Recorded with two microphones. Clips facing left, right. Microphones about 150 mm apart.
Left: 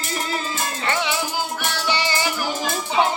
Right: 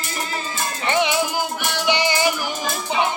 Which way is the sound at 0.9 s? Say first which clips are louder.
Right 5 dB; 20° right (ahead or behind).